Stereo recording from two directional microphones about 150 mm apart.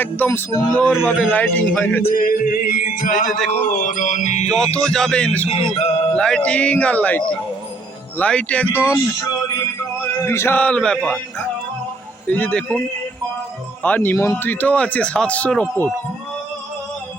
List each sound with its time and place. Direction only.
0.0 s speech: 15° left (ahead or behind)
2.1 s music: 70° left (ahead or behind); by 4.4 s 50° left (ahead or behind)
4.5 s speech: 5° left (ahead or behind)
5.5 s music: 45° left (ahead or behind)
6.1 s speech: 5° left (ahead or behind)
12.3 s speech: 10° left (ahead or behind)
13.8 s speech: 10° left (ahead or behind)